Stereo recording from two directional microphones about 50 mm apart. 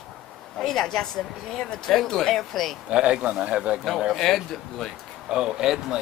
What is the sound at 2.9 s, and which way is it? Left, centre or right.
Speech, centre.